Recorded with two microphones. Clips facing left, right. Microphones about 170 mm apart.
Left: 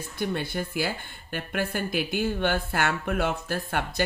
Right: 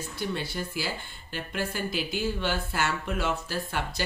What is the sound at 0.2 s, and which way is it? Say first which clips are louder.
Speech: left 4 dB; 55° left (ahead or behind).